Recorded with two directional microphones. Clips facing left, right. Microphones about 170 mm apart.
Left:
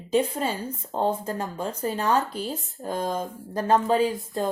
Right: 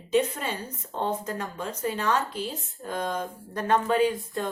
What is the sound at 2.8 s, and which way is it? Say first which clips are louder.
Speech: left 2 dB; 40° left (ahead or behind).